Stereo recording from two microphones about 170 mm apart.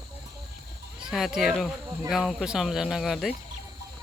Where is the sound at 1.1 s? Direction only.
Centre (ahead or behind).